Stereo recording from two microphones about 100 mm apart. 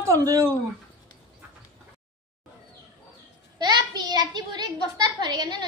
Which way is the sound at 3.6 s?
45° right (ahead or behind).